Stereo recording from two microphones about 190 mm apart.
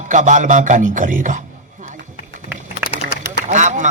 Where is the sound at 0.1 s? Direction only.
40° right (ahead or behind).